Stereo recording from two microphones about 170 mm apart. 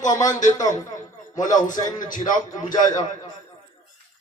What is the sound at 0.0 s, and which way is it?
Speech, 20° left (ahead or behind).